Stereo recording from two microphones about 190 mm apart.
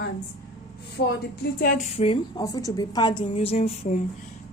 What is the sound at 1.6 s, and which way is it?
Speech, 45° left (ahead or behind).